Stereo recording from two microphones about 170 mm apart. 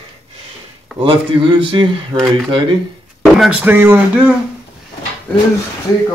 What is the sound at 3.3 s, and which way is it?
Speech, 5° right (ahead or behind).